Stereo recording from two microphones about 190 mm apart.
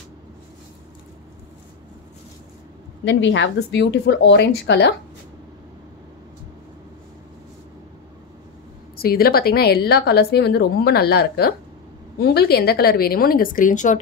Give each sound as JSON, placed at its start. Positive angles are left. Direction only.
{"t": 3.1, "sound": "a woman's voice", "side_deg": 70}
{"t": 8.9, "sound": "a woman's voice", "side_deg": 50}